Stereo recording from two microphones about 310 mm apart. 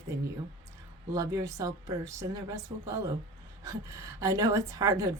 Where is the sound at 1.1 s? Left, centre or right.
Centre.